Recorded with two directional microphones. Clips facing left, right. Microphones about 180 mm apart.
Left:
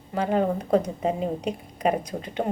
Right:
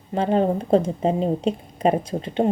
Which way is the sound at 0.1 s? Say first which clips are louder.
Right 3 dB; 30° right (ahead or behind).